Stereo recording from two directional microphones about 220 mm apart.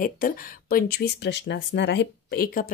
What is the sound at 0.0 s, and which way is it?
Speech, 40° left (ahead or behind).